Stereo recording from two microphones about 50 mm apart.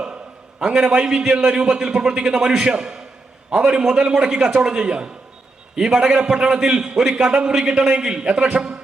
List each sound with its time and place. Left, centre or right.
0.6 s a man's voice: centre